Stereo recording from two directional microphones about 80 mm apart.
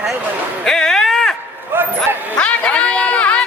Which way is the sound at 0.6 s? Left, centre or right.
Centre.